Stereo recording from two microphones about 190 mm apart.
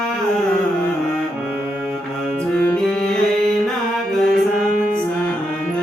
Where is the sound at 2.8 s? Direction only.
5° left (ahead or behind).